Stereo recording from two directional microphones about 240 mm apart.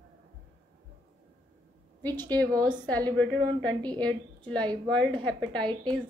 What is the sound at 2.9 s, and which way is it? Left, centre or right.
A woman's voice, centre.